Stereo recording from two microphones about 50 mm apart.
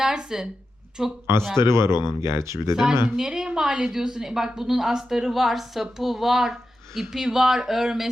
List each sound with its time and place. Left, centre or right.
0.0 s a woman's voice: centre
1.5 s speech: right
3.2 s a woman's voice: centre